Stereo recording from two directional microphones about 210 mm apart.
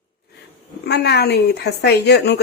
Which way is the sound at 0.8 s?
50° left (ahead or behind).